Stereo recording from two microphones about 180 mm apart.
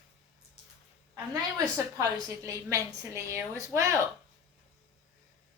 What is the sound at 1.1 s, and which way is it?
A woman's voice, 20° right (ahead or behind).